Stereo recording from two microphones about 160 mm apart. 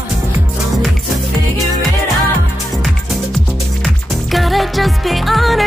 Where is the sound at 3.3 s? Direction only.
Centre (ahead or behind).